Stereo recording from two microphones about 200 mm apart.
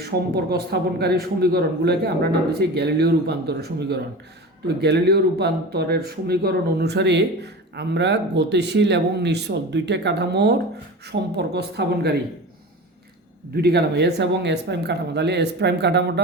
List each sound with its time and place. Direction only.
0.0 s a man's voice: 55° right (ahead or behind)
13.6 s speech: 55° right (ahead or behind)